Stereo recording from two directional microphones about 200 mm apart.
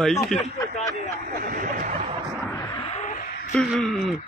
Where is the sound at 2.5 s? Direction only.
20° left (ahead or behind); by 3.5 s 45° left (ahead or behind).